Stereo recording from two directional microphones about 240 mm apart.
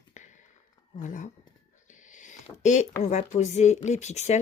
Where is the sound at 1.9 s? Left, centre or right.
Left.